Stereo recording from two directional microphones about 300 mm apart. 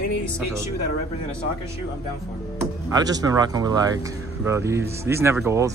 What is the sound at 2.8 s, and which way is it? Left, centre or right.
A man's voice, centre.